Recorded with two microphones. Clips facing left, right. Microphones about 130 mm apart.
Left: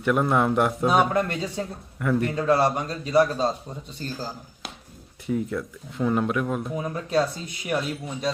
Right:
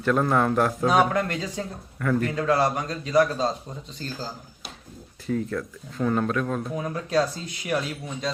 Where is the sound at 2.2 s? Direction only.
25° left (ahead or behind).